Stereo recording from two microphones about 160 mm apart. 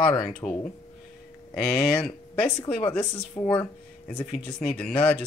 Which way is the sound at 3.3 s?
15° left (ahead or behind).